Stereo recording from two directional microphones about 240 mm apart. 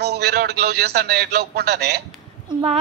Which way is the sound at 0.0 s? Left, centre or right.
Right.